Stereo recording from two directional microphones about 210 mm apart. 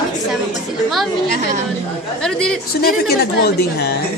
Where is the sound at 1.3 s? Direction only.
35° right (ahead or behind).